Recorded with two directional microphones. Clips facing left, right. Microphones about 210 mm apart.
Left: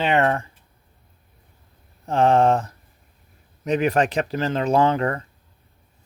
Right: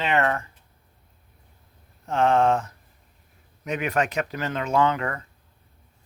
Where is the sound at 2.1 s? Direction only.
35° left (ahead or behind).